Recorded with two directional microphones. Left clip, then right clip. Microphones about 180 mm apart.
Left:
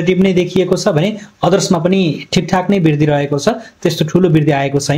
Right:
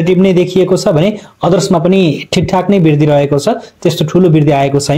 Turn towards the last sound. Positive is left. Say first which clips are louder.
# right 4 dB
turn(degrees=-25)  # may be behind; listen again after turning